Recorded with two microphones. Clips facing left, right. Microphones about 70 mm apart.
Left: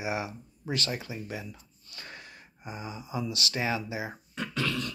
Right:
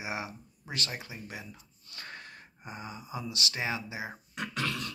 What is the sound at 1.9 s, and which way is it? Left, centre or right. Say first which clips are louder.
Snort: right 1 dB; right.